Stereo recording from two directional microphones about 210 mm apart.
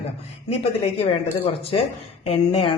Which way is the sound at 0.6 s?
30° left (ahead or behind).